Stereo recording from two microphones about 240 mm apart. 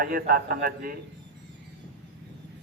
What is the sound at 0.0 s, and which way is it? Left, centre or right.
Speech, right.